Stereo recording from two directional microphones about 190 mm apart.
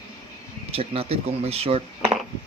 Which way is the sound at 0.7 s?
30° right (ahead or behind).